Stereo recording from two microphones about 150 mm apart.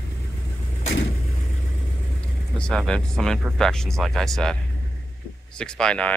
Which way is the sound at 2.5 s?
5° left (ahead or behind).